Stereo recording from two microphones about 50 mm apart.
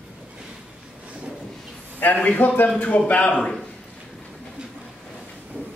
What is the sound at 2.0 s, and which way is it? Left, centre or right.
A man's voice, left.